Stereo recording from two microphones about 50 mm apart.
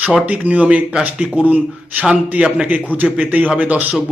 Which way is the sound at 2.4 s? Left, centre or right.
Right.